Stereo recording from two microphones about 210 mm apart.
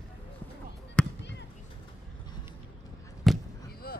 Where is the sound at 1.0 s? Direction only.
5° left (ahead or behind).